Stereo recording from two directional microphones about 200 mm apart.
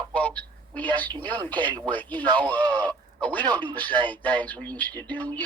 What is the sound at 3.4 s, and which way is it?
Speech, 20° right (ahead or behind).